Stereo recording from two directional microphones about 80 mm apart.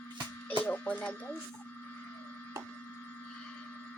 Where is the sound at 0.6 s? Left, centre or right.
Left.